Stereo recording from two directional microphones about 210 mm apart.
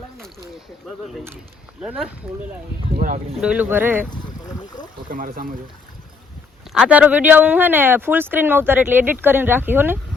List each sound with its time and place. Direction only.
1.8 s speech: 5° right (ahead or behind)
2.9 s speech: 40° right (ahead or behind)
3.4 s speech: 5° right (ahead or behind)
5.0 s speech: 40° right (ahead or behind)
6.7 s speech: 5° right (ahead or behind)